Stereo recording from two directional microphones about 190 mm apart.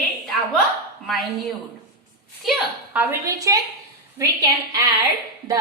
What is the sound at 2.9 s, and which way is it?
Speech, 15° right (ahead or behind).